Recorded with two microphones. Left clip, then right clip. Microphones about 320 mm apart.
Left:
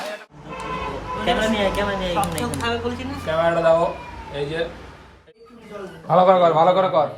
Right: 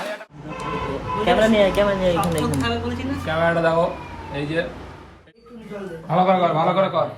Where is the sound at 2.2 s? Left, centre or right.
Centre.